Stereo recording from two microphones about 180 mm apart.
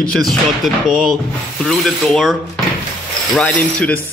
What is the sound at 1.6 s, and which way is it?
Mechanisms, centre (ahead or behind).